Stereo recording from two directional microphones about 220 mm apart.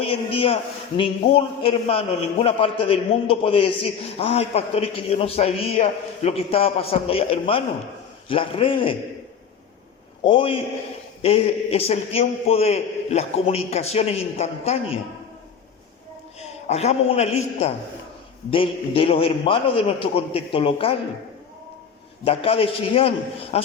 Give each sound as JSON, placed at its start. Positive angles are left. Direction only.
{"t": 0.0, "sound": "a man's voice", "side_deg": 25}
{"t": 10.2, "sound": "a man's voice", "side_deg": 25}
{"t": 16.4, "sound": "a man's voice", "side_deg": 30}
{"t": 22.2, "sound": "a man's voice", "side_deg": 25}